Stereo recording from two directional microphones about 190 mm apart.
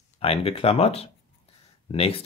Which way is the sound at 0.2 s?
30° left (ahead or behind).